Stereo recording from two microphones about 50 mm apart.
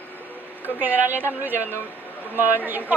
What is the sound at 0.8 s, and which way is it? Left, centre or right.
A woman's voice, right.